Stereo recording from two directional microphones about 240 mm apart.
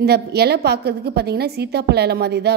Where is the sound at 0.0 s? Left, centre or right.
Right.